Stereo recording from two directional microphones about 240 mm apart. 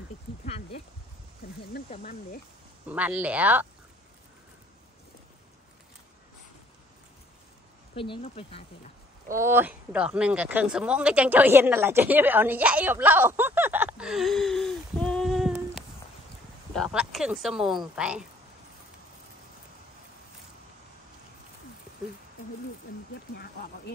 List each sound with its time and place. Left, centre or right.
1.9 s speech: left
2.9 s speech: centre
7.9 s speech: left
9.3 s speech: centre